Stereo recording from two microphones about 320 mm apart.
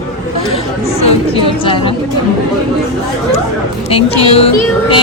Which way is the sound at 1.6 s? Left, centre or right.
Centre.